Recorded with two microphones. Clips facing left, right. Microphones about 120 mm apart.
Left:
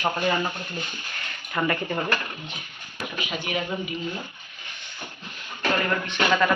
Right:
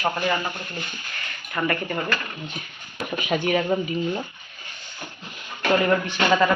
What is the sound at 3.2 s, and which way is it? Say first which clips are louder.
Speech: right 8 dB; 50° right (ahead or behind).